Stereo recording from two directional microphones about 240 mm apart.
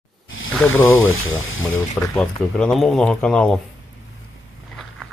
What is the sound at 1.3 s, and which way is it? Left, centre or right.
Speech, left.